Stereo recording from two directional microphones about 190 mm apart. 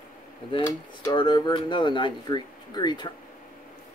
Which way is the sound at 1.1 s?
25° left (ahead or behind).